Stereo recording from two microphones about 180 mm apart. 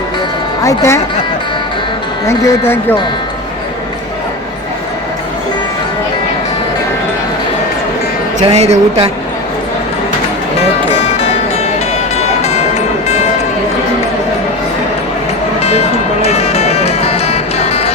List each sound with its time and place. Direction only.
0.6 s speech: 20° left (ahead or behind)
2.2 s speech: 15° left (ahead or behind)
8.4 s speech: 30° right (ahead or behind)
12.4 s music: 35° left (ahead or behind)
16.2 s music: 35° left (ahead or behind)